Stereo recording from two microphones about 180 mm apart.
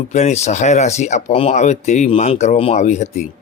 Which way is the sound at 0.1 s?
40° left (ahead or behind).